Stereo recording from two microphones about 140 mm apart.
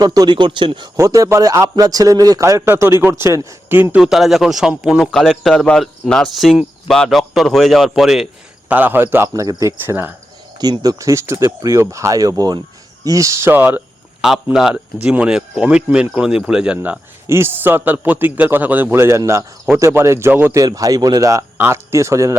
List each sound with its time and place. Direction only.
0.0 s speech: 30° right (ahead or behind)
0.9 s a man's voice: 25° right (ahead or behind); by 8.3 s 5° right (ahead or behind)
8.7 s a man's voice: 15° right (ahead or behind)
10.6 s a man's voice: 25° right (ahead or behind); by 17.0 s 5° right (ahead or behind)
17.2 s a man's voice: 15° right (ahead or behind)
20.6 s a man's voice: 25° right (ahead or behind)